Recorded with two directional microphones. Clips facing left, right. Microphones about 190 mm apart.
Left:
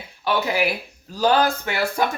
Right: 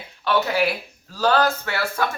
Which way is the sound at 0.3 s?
15° left (ahead or behind).